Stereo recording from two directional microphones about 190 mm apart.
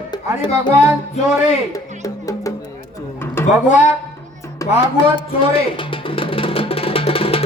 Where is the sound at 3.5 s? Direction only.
40° left (ahead or behind).